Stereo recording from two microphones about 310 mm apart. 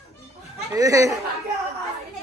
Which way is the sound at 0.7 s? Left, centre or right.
Centre.